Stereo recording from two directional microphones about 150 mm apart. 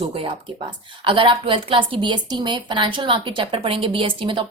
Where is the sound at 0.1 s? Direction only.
35° right (ahead or behind).